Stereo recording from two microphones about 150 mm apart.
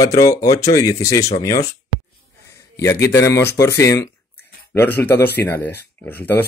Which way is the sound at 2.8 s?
20° left (ahead or behind).